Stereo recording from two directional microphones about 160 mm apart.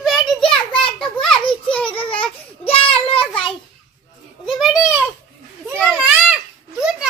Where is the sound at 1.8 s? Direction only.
35° left (ahead or behind).